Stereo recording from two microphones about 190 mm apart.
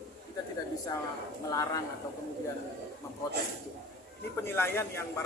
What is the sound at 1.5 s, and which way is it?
Speech, 20° left (ahead or behind).